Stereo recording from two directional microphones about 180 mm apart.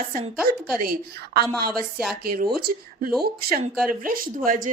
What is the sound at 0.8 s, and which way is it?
A woman's voice, 55° right (ahead or behind).